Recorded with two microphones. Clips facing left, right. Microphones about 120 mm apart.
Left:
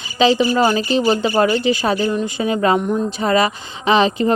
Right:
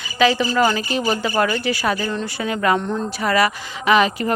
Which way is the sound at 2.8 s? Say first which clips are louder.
Left 4 dB; 10° left (ahead or behind).